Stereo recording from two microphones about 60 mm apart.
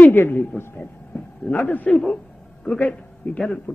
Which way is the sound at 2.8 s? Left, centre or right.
Left.